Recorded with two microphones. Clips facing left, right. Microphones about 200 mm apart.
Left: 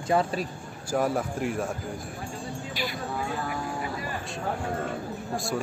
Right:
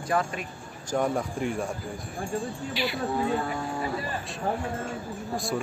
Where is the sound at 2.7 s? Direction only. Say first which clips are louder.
Right 3 dB; 45° left (ahead or behind).